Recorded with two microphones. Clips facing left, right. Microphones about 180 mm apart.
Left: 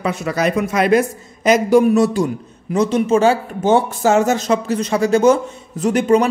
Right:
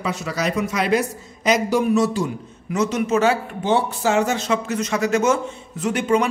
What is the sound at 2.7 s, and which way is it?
Speech, 30° left (ahead or behind).